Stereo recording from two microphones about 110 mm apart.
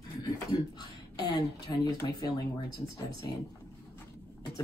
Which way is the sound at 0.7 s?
40° left (ahead or behind).